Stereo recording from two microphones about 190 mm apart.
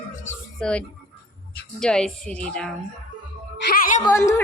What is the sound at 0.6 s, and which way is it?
Speech, 5° left (ahead or behind).